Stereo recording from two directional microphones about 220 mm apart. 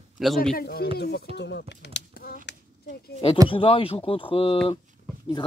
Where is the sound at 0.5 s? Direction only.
45° left (ahead or behind).